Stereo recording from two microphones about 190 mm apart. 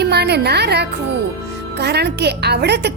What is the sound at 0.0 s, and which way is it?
A woman's voice, 60° right (ahead or behind).